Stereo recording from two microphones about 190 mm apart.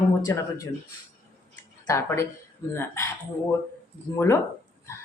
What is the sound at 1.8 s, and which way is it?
Speech, 15° left (ahead or behind).